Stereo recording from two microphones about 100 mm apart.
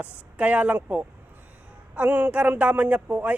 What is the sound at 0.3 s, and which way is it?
A man's voice, 15° right (ahead or behind).